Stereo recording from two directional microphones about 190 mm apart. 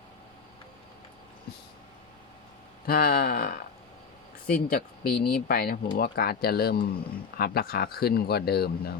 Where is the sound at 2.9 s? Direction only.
50° left (ahead or behind).